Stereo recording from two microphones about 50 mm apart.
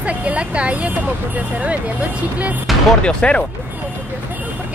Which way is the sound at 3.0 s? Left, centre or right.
Left.